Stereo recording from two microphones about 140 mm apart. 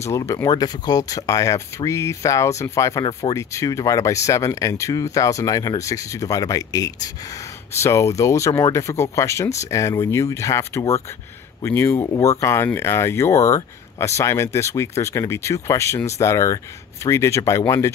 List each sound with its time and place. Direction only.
0.0 s speech: 20° left (ahead or behind)